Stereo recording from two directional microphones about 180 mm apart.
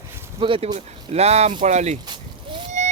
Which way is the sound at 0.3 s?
30° right (ahead or behind).